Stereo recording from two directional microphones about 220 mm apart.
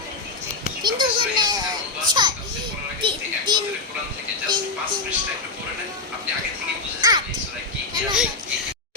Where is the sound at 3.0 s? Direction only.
20° right (ahead or behind).